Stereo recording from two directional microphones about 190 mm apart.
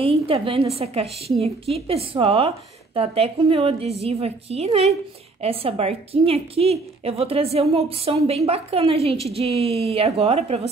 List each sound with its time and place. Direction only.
0.0 s a woman's voice: 30° right (ahead or behind)